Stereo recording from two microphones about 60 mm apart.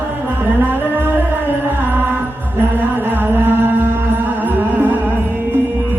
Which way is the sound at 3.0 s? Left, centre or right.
Right.